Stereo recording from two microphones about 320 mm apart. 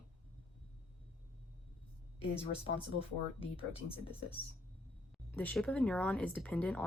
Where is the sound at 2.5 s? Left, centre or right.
Centre.